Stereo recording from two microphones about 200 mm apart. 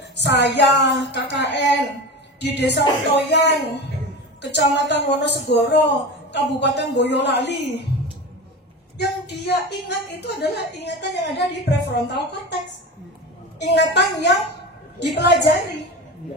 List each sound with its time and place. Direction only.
0.1 s a woman's voice: 60° left (ahead or behind)
8.9 s a woman's voice: 55° left (ahead or behind)
13.6 s a woman's voice: 60° left (ahead or behind)